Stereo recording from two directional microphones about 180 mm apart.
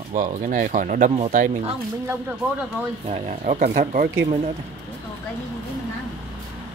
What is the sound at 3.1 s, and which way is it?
A man's voice, 40° right (ahead or behind).